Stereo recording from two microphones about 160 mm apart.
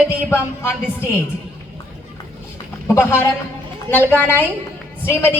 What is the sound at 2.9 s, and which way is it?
A woman's voice, 15° left (ahead or behind).